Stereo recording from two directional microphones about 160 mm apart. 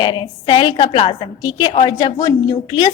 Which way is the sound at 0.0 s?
30° left (ahead or behind).